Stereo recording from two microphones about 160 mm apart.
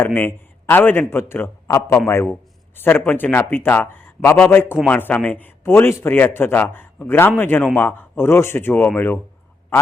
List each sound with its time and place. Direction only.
0.0 s a man's voice: 15° left (ahead or behind)